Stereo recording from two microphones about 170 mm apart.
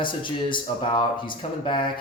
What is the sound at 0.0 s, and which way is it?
Speech, 30° left (ahead or behind).